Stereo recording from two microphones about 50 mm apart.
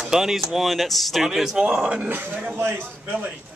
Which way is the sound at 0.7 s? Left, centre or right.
Centre.